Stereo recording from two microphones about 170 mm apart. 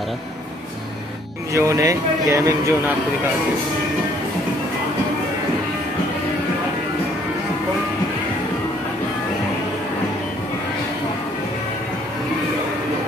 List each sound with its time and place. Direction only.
1.5 s a man's voice: 20° right (ahead or behind)